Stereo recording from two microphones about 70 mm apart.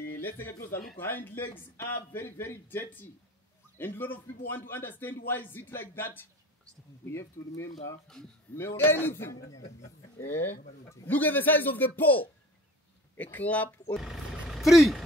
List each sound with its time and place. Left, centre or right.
0.1 s a man's voice: left
7.1 s a man's voice: left
7.7 s speech: centre
8.5 s a man's voice: left
11.1 s a man's voice: left
13.9 s vehicle: centre